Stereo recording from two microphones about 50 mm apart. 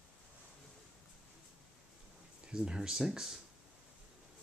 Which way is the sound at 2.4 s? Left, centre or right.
Centre.